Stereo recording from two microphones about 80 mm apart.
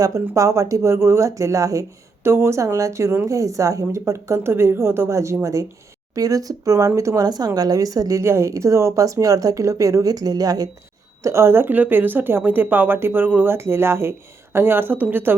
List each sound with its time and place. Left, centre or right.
0.0 s a woman's voice: right
7.2 s a woman's voice: right
11.2 s speech: right